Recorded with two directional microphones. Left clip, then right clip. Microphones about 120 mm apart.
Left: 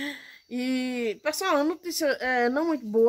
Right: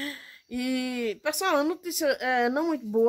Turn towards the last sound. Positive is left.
turn(degrees=-20)  # may be behind; listen again after turning